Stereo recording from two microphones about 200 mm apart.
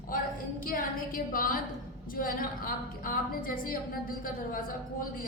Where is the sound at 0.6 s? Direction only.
45° left (ahead or behind).